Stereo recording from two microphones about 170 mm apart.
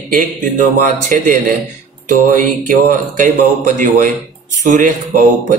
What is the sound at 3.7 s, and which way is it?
Speech, 50° right (ahead or behind).